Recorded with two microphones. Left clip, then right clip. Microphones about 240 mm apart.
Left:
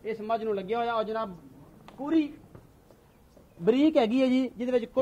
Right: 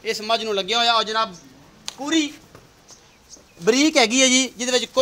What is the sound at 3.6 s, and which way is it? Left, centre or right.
Speech, centre.